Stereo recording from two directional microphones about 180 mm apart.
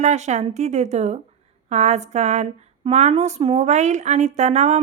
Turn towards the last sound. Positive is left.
turn(degrees=-40)  # may be behind; listen again after turning